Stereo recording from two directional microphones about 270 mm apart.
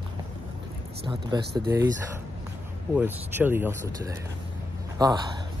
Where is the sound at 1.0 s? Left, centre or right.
Centre.